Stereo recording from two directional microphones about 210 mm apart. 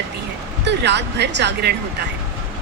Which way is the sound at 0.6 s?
55° right (ahead or behind).